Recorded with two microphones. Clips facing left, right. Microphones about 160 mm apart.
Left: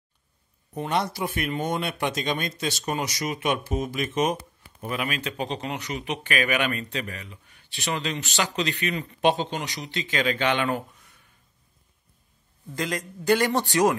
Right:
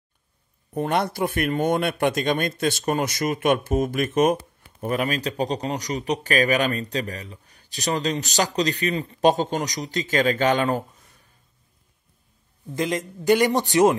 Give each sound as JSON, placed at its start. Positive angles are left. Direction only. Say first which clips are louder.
{"t": 0.7, "sound": "speech", "louder": "right 4 dB", "side_deg": -55}
{"t": 4.8, "sound": "a man's voice", "louder": "right 5 dB", "side_deg": -40}
{"t": 12.7, "sound": "a man's voice", "louder": "right 5 dB", "side_deg": -20}